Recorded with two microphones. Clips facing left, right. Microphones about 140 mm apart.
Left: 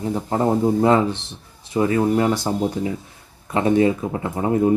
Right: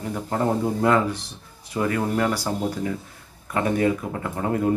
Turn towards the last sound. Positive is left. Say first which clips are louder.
# left 4 dB
turn(degrees=20)  # may be behind; listen again after turning